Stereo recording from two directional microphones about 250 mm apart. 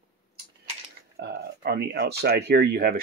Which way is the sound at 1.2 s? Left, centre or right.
Right.